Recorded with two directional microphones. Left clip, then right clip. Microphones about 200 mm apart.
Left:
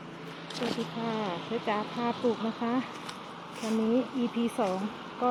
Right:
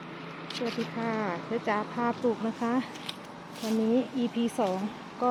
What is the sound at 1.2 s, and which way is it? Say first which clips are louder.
Speech: right 1 dB; centre (ahead or behind).